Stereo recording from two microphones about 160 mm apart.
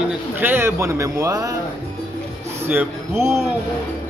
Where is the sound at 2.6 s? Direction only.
15° right (ahead or behind).